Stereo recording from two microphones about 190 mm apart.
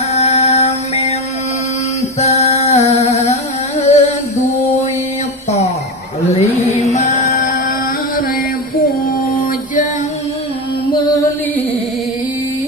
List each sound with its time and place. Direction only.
0.1 s music: 35° left (ahead or behind)
6.2 s mantra: 35° left (ahead or behind)
7.2 s music: 45° left (ahead or behind)
8.8 s music: 45° left (ahead or behind)